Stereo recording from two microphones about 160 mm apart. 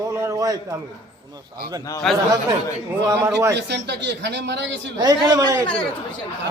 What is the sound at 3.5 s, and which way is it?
Speech, 90° right.